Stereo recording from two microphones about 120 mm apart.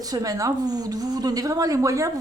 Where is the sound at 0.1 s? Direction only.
30° right (ahead or behind).